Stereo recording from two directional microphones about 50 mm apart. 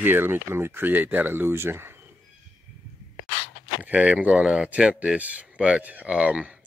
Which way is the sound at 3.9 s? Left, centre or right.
Right.